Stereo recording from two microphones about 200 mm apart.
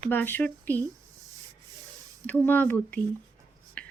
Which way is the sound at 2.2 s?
5° left (ahead or behind).